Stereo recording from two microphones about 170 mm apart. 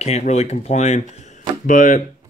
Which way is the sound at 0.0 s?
40° left (ahead or behind).